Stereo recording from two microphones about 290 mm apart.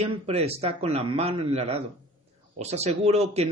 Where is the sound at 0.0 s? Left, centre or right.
Right.